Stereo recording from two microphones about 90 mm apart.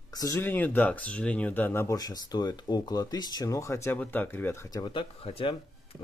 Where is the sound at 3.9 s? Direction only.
15° left (ahead or behind).